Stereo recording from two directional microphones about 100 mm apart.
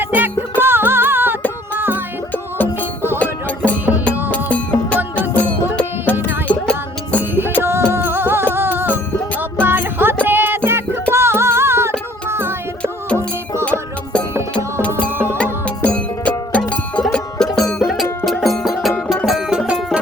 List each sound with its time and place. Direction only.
0.0 s music: 20° right (ahead or behind)
3.2 s music: 15° left (ahead or behind)
7.6 s music: 25° right (ahead or behind)
13.7 s music: 10° left (ahead or behind); by 20.0 s 10° right (ahead or behind)